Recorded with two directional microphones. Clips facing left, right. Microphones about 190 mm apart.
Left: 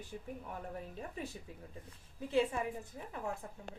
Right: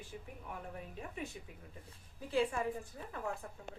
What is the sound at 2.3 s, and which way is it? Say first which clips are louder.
Speech: left 1 dB; 25° left (ahead or behind).